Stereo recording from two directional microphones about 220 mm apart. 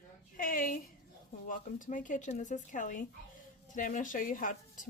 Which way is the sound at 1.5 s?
35° left (ahead or behind).